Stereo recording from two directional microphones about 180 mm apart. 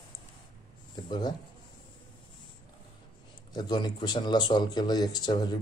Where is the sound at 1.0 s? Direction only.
25° left (ahead or behind).